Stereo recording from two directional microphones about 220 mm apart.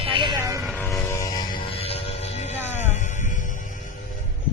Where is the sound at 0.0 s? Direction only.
20° right (ahead or behind).